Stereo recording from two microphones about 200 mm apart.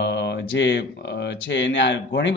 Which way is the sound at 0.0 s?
60° left (ahead or behind).